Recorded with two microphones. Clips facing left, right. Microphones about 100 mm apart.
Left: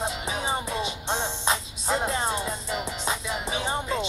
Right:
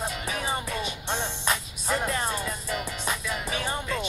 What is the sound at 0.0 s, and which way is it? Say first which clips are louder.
Music: left 2 dB; 25° left (ahead or behind).